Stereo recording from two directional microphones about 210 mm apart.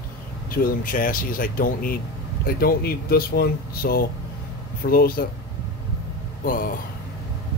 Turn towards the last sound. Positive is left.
turn(degrees=40)  # may be behind; listen again after turning